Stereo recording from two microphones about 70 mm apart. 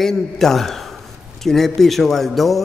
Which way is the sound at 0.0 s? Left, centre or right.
Centre.